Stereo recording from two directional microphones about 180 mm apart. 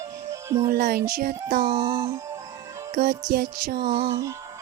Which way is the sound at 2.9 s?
55° right (ahead or behind).